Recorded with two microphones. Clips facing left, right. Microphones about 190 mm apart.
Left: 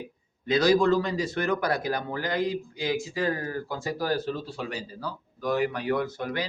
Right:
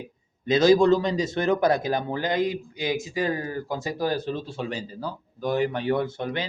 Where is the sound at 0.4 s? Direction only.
25° right (ahead or behind).